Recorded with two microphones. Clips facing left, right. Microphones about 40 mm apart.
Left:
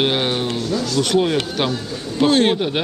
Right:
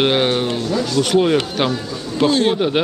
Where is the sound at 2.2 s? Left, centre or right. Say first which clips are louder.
Even; centre.